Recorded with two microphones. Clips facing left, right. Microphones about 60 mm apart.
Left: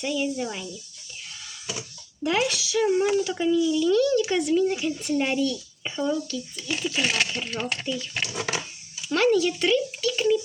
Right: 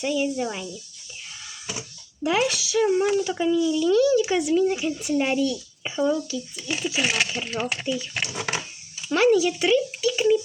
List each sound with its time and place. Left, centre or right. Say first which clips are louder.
0.0 s a child's voice: right 2 dB; centre
2.2 s a child's voice: right 2 dB; centre
8.3 s a sound: left 1 dB; right
9.1 s a child's voice: right 2 dB; centre